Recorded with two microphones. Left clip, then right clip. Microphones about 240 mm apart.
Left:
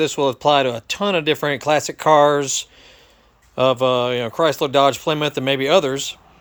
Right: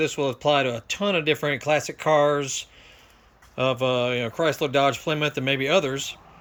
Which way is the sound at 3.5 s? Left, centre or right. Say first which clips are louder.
Left 7 dB; left.